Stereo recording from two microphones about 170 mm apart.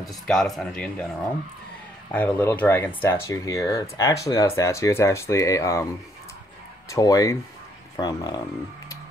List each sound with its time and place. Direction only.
0.0 s speech: centre (ahead or behind)
2.0 s speech: 10° left (ahead or behind)
6.9 s speech: 20° left (ahead or behind)